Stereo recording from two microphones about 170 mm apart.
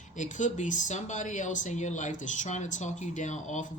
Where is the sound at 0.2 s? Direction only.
45° left (ahead or behind).